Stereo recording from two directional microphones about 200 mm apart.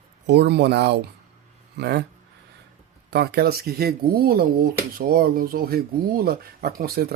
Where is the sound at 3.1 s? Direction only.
55° right (ahead or behind).